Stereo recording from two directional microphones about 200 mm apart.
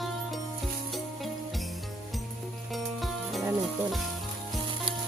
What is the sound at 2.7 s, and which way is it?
Music, centre (ahead or behind).